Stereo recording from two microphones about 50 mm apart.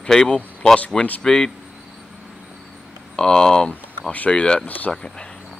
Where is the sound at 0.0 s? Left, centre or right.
Centre.